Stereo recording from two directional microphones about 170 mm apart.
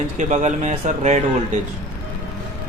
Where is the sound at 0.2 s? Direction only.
45° right (ahead or behind).